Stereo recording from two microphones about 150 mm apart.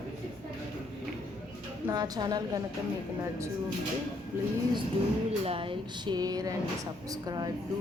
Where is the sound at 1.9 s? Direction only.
25° right (ahead or behind).